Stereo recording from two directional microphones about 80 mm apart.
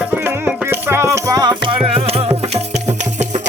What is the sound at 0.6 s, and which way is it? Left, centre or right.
Rattle, right.